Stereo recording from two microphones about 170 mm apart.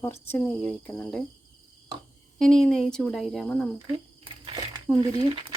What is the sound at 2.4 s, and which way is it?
Speech, 5° left (ahead or behind).